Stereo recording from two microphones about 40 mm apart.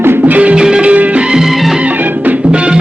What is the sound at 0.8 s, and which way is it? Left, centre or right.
Music, right.